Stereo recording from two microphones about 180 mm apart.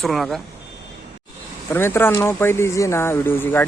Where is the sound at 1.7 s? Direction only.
15° left (ahead or behind).